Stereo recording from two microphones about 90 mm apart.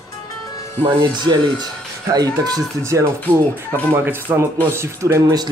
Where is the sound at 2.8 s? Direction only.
35° right (ahead or behind).